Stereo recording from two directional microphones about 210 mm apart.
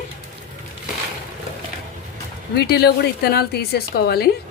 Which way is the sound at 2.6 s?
50° left (ahead or behind).